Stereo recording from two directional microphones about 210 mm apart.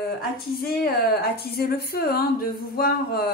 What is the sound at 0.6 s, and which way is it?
A woman's voice, 45° left (ahead or behind).